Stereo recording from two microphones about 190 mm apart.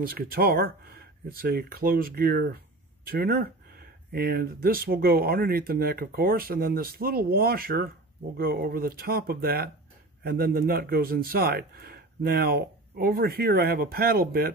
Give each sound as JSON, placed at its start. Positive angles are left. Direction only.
{"t": 0.0, "sound": "speech", "side_deg": -50}